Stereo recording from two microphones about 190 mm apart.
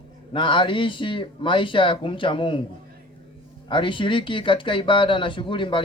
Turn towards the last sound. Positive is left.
turn(degrees=25)  # may be behind; listen again after turning